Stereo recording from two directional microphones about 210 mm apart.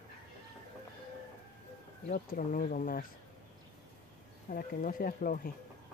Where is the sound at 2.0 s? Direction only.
40° left (ahead or behind).